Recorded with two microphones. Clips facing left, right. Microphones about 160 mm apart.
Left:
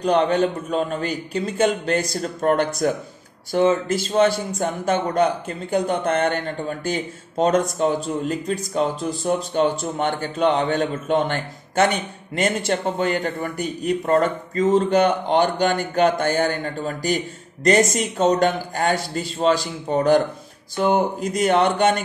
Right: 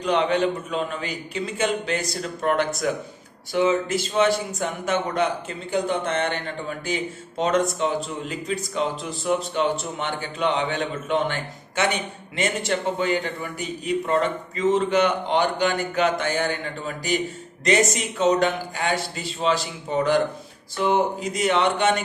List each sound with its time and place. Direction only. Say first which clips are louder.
0.0 s a man's voice: left 3 dB; 40° left (ahead or behind)